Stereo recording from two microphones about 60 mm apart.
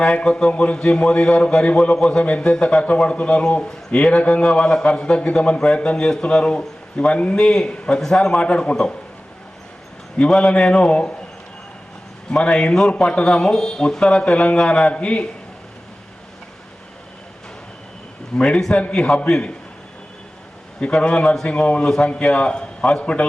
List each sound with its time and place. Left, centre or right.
0.0 s a man's voice: centre
10.2 s speech: centre
12.4 s speech: centre
18.3 s a man's voice: centre
20.8 s a man's voice: centre